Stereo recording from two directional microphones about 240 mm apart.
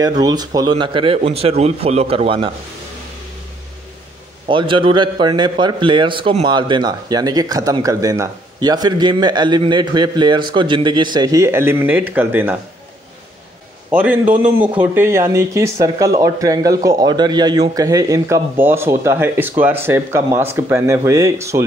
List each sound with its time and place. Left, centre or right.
0.2 s a man's voice: centre
4.5 s a man's voice: right
13.8 s a man's voice: centre